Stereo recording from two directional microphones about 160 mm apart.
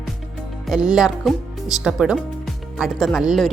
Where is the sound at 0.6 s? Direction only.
Centre (ahead or behind).